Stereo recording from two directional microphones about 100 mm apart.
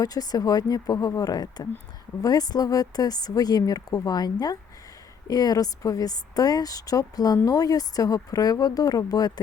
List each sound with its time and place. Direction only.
0.0 s a woman's voice: 40° left (ahead or behind)